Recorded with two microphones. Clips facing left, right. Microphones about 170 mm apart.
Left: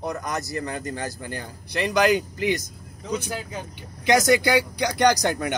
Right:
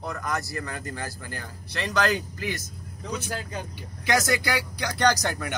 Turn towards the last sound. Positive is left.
turn(degrees=15)  # may be behind; listen again after turning